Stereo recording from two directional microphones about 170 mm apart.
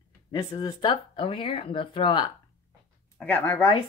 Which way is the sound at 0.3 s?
20° left (ahead or behind).